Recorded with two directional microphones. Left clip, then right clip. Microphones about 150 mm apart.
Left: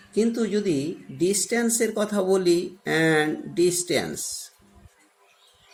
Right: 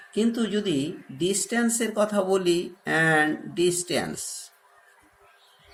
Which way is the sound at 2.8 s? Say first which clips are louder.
Even; 90° left.